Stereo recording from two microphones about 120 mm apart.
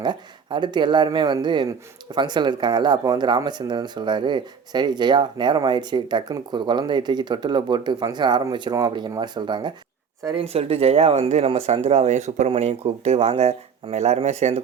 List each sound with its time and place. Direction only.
0.0 s speech: 40° right (ahead or behind)
10.3 s speech: 55° right (ahead or behind); by 12.5 s 75° right (ahead or behind)
12.5 s speech: 60° right (ahead or behind)